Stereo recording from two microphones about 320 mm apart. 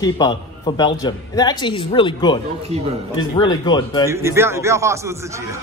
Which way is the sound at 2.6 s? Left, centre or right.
Centre.